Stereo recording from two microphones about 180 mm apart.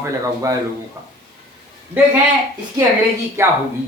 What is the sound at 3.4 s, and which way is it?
Speech, 15° right (ahead or behind).